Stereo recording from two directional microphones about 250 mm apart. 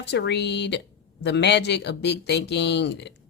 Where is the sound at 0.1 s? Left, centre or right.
Left.